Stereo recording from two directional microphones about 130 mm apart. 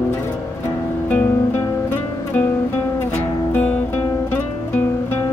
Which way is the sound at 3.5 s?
10° left (ahead or behind).